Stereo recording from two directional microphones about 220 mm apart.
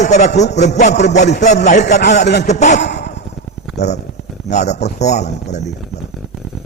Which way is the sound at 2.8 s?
50° left (ahead or behind).